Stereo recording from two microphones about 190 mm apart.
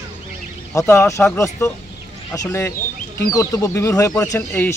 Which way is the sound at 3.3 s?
15° left (ahead or behind).